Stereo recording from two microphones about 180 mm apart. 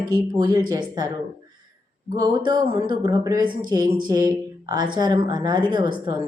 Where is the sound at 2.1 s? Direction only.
20° right (ahead or behind).